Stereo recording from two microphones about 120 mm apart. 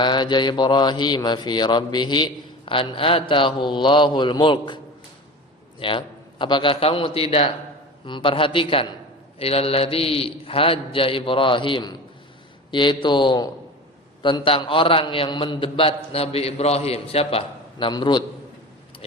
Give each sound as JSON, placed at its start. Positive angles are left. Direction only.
{"t": 0.0, "sound": "mantra", "side_deg": 40}
{"t": 5.8, "sound": "a man's voice", "side_deg": 45}
{"t": 12.7, "sound": "mantra", "side_deg": 40}
{"t": 14.2, "sound": "a man's voice", "side_deg": 40}
{"t": 17.9, "sound": "mantra", "side_deg": 40}